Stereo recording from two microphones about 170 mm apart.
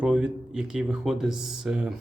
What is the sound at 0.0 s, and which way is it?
Speech, 5° right (ahead or behind).